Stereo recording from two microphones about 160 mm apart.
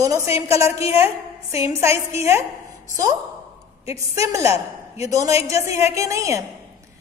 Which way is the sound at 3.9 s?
20° right (ahead or behind).